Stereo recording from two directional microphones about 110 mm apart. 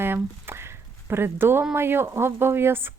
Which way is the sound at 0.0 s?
20° right (ahead or behind).